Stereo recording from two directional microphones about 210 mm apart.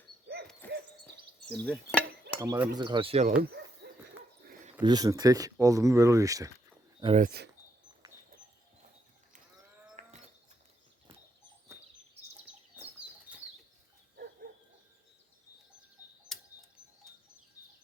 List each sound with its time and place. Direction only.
0.6 s owl: 10° left (ahead or behind)
1.5 s stir: 5° left (ahead or behind)
2.4 s speech: 15° right (ahead or behind); by 3.3 s 30° right (ahead or behind)
4.8 s speech: 20° right (ahead or behind)
7.2 s speech: 50° right (ahead or behind)
9.9 s livestock: 35° right (ahead or behind)
12.7 s bird: 5° right (ahead or behind)
13.3 s bird flight: 5° right (ahead or behind)
16.3 s a sound: centre (ahead or behind)